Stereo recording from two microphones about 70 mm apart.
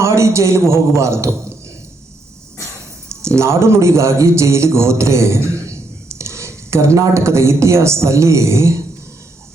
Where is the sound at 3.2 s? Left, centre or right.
Right.